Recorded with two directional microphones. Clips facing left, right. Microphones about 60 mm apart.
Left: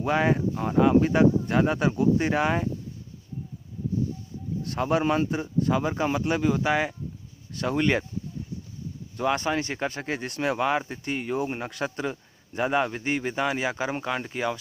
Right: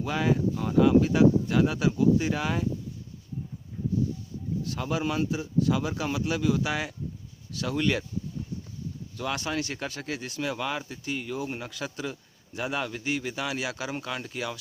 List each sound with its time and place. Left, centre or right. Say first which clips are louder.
0.0 s speech: left 3 dB; left
4.6 s speech: left 6 dB; left
9.1 s speech: left 5 dB; left
10.2 s speech: left 6 dB; left